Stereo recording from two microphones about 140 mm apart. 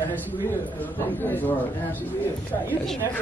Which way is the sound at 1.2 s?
15° left (ahead or behind).